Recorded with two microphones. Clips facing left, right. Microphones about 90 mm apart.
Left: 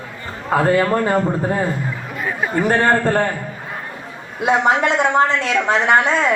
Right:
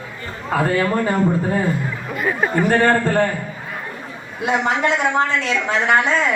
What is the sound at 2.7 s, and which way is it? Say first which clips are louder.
Speech: left 2 dB; 25° left (ahead or behind).